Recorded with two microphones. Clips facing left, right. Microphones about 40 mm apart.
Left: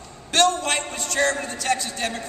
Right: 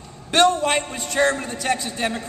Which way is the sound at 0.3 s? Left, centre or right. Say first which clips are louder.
Right 3 dB; centre.